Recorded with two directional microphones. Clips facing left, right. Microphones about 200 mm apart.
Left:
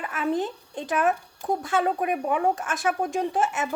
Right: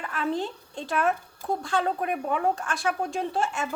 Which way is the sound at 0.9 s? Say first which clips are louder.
Left 2 dB; centre (ahead or behind).